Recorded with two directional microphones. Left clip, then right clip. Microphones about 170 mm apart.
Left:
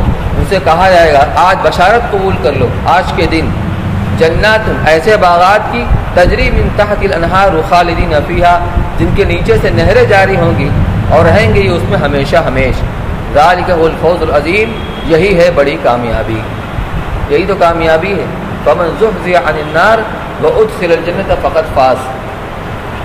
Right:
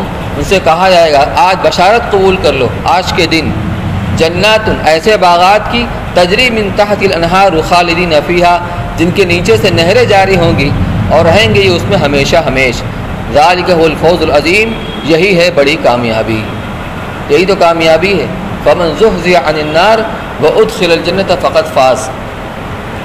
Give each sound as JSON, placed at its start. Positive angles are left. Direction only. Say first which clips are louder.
{"t": 0.5, "sound": "a man's voice", "louder": "even", "side_deg": -40}
{"t": 17.3, "sound": "a man's voice", "louder": "right 2 dB", "side_deg": -35}
{"t": 19.2, "sound": "a man's voice", "louder": "right 2 dB", "side_deg": -35}